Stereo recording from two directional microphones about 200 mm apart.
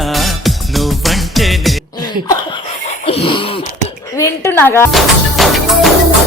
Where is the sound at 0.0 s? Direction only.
Centre (ahead or behind).